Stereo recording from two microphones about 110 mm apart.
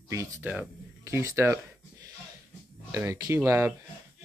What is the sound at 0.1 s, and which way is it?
Speech, 25° right (ahead or behind).